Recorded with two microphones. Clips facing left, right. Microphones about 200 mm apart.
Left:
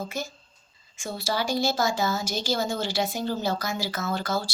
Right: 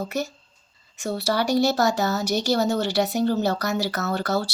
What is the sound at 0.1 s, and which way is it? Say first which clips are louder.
Speech: right 6 dB; 65° right (ahead or behind).